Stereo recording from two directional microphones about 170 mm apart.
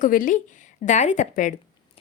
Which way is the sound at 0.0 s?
55° left (ahead or behind).